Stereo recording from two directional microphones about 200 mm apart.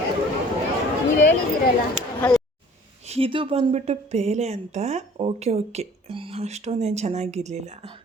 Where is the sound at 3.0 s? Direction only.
30° right (ahead or behind).